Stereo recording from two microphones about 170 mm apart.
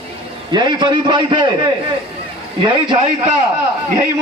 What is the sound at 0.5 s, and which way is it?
Speech, 25° right (ahead or behind).